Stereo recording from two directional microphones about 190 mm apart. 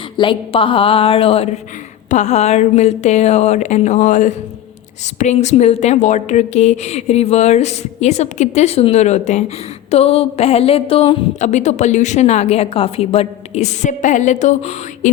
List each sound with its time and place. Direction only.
0.2 s a woman's voice: 25° left (ahead or behind)